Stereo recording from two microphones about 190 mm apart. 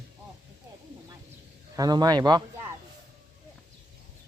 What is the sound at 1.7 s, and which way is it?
Speech, 20° right (ahead or behind).